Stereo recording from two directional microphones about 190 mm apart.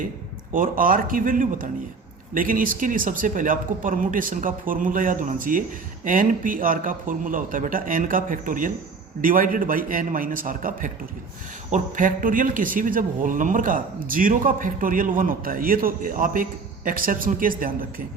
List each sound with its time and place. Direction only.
0.5 s a man's voice: 45° right (ahead or behind)